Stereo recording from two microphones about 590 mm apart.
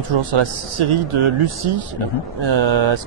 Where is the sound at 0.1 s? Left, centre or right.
Right.